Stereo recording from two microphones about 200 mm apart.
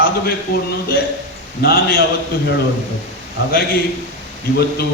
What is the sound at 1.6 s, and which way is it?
Speech, 50° left (ahead or behind).